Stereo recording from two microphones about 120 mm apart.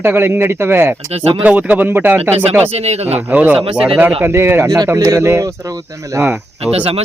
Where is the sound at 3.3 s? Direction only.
15° right (ahead or behind).